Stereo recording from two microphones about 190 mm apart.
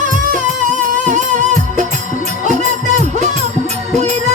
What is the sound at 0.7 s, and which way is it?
Music, 40° right (ahead or behind).